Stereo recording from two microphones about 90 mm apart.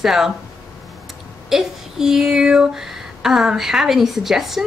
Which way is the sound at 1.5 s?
5° right (ahead or behind).